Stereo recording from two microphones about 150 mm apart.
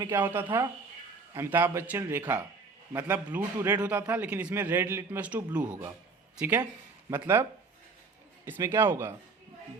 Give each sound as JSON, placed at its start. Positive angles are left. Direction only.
{"t": 0.0, "sound": "a man's voice", "side_deg": -15}
{"t": 7.1, "sound": "a man's voice", "side_deg": -15}
{"t": 8.4, "sound": "a man's voice", "side_deg": -15}